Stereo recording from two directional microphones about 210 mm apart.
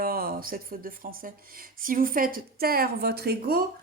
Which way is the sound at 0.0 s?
45° right (ahead or behind).